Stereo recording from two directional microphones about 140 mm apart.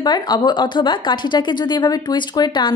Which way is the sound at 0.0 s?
30° left (ahead or behind).